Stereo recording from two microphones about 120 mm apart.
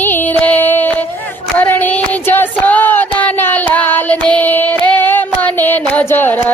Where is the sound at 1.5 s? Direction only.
15° left (ahead or behind).